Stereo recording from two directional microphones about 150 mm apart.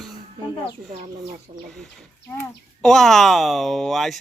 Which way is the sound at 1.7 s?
10° left (ahead or behind).